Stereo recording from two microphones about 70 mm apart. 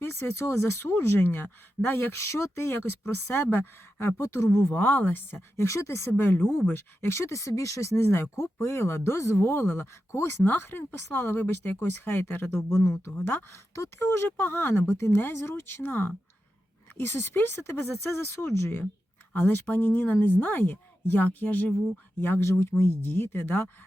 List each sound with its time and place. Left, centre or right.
0.0 s speech: left
4.7 s speech: left
5.6 s speech: left
9.4 s speech: left
12.6 s speech: left